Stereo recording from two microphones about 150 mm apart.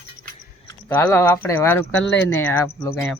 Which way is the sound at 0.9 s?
15° left (ahead or behind).